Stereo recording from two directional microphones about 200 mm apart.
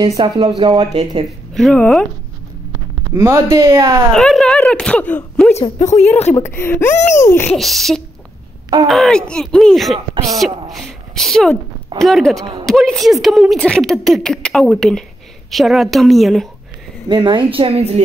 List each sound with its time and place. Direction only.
0.0 s a woman's voice: 25° right (ahead or behind)
1.5 s speech: 5° left (ahead or behind)
3.2 s speech: 15° right (ahead or behind)
4.1 s speech: 5° left (ahead or behind)
5.5 s a woman's voice: 35° left (ahead or behind)
6.3 s speech: 10° left (ahead or behind)
7.0 s a woman's voice: 35° left (ahead or behind)
7.2 s speech: 10° left (ahead or behind)
7.5 s a woman's voice: centre (ahead or behind)
17.1 s a woman's voice: 20° right (ahead or behind)